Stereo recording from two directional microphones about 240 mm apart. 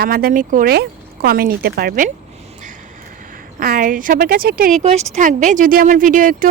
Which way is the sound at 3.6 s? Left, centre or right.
Right.